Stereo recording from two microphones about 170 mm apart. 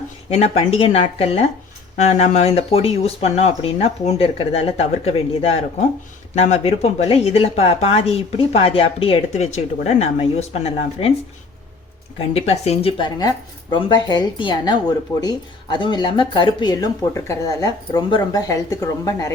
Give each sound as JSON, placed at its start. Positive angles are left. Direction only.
{"t": 0.3, "sound": "speech", "side_deg": 35}
{"t": 12.3, "sound": "speech", "side_deg": 40}